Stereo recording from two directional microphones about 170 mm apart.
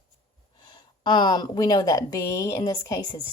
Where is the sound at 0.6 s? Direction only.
25° left (ahead or behind).